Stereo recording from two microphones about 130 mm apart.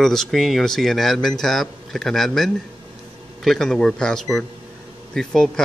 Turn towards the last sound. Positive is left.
turn(degrees=5)  # may be behind; listen again after turning